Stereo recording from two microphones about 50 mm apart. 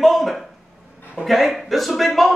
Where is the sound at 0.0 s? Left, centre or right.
Centre.